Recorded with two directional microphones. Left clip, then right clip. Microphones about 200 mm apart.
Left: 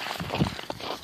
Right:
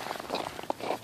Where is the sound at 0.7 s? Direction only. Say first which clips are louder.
Right 2 dB; 25° left (ahead or behind).